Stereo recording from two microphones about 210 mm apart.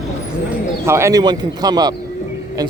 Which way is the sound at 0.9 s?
15° right (ahead or behind).